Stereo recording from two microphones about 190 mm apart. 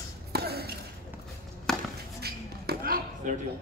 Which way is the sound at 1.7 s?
Centre (ahead or behind).